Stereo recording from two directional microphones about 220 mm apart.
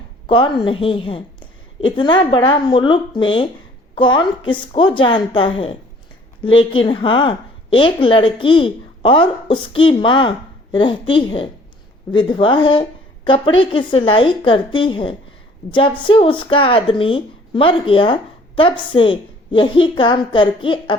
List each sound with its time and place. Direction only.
0.3 s a woman's voice: 25° left (ahead or behind)